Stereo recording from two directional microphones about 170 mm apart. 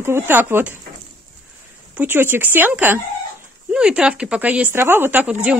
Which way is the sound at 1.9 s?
10° right (ahead or behind).